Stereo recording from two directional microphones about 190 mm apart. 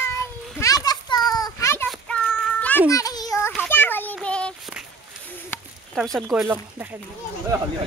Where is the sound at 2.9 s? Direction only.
20° left (ahead or behind).